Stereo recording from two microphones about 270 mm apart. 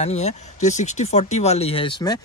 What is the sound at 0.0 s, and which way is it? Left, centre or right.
Speech, left.